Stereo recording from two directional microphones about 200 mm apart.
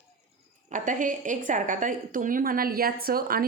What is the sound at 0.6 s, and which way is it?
Speech, 40° right (ahead or behind).